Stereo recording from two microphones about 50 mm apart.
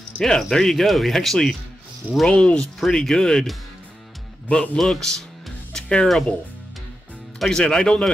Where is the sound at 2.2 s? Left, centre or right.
Centre.